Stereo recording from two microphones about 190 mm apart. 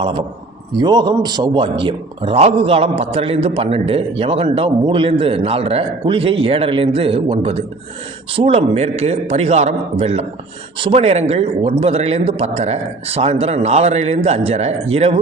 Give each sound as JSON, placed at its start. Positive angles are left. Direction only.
{"t": 0.0, "sound": "a man's voice", "side_deg": -30}